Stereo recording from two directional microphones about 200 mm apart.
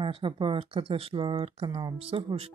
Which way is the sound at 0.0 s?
25° right (ahead or behind).